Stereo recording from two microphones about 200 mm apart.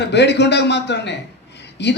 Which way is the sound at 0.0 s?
60° left (ahead or behind).